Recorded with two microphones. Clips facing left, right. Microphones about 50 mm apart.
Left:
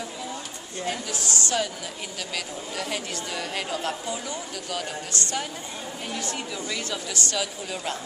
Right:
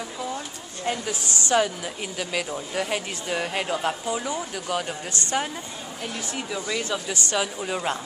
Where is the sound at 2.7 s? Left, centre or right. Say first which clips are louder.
Right 1 dB; right.